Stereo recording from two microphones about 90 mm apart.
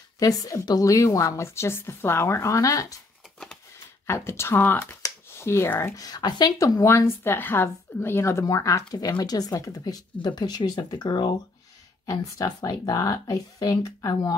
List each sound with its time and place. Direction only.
0.2 s a woman's voice: 40° left (ahead or behind)
4.1 s a woman's voice: 30° left (ahead or behind)
5.9 s speech: 45° left (ahead or behind)
6.8 s a woman's voice: 25° left (ahead or behind); by 11.3 s 55° left (ahead or behind)
12.1 s speech: 45° left (ahead or behind)